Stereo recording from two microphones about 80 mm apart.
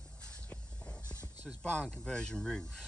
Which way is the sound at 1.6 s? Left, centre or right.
Centre.